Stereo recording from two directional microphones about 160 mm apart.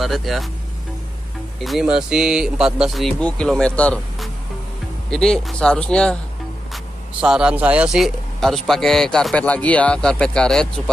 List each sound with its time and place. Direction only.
0.0 s speech: centre (ahead or behind)
1.6 s speech: centre (ahead or behind)
6.7 s speech: 5° right (ahead or behind)